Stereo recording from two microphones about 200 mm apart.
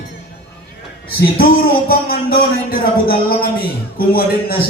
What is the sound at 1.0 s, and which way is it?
A man's voice, 50° left (ahead or behind).